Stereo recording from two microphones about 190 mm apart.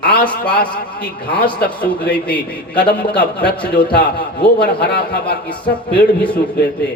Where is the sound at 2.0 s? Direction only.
5° left (ahead or behind).